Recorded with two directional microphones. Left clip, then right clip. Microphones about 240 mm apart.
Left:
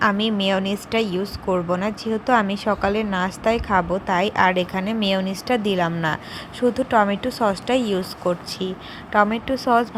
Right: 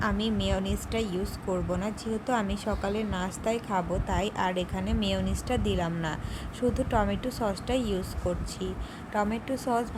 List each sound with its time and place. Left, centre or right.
0.0 s speech: centre